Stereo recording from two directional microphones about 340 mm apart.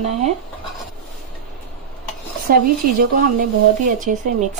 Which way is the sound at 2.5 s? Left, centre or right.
Right.